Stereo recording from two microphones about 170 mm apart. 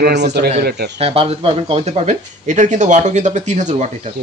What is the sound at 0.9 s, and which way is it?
Speech, 35° right (ahead or behind).